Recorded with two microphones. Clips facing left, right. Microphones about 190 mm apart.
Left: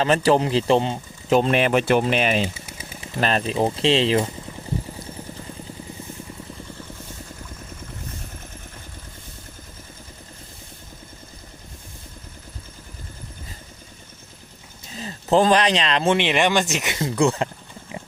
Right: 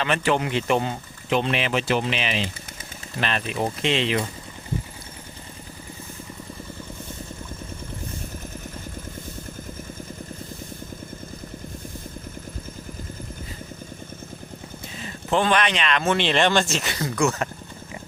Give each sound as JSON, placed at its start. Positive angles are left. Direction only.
{"t": 0.0, "sound": "speech", "side_deg": 35}
{"t": 1.3, "sound": "speech", "side_deg": 40}
{"t": 14.9, "sound": "speech", "side_deg": 35}
{"t": 16.1, "sound": "speech", "side_deg": 15}